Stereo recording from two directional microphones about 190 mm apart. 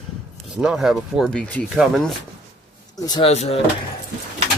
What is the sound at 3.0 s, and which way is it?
Speech, 20° left (ahead or behind).